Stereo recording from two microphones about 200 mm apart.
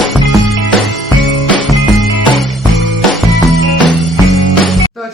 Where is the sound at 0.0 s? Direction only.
Centre (ahead or behind).